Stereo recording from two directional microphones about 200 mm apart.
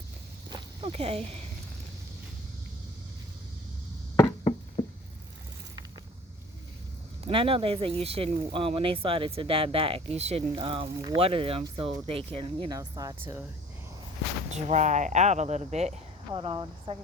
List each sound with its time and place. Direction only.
0.5 s walk: 25° right (ahead or behind)
4.8 s patter: 30° left (ahead or behind)
7.3 s speech: 25° right (ahead or behind)
12.6 s speech: 20° right (ahead or behind)
14.5 s speech: 35° right (ahead or behind)